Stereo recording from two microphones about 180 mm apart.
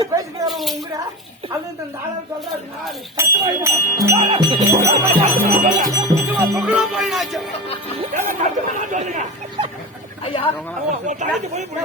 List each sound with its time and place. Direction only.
0.4 s music: centre (ahead or behind)
3.2 s speech: 15° right (ahead or behind)
4.2 s speech: 30° right (ahead or behind)
4.9 s speech: 40° right (ahead or behind)
5.8 s music: 15° right (ahead or behind)
8.1 s speech: 45° right (ahead or behind)
10.2 s speech: 30° left (ahead or behind)
11.0 s speech: 40° right (ahead or behind)